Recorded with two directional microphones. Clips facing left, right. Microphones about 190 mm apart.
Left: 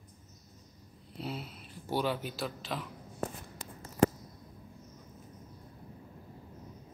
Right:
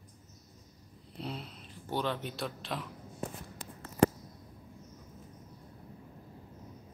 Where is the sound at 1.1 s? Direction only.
5° left (ahead or behind).